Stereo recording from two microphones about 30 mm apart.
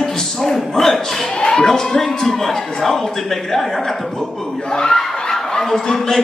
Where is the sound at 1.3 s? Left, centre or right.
Left.